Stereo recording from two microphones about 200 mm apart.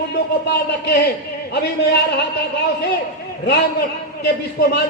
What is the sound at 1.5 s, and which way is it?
A man's voice, 55° left (ahead or behind).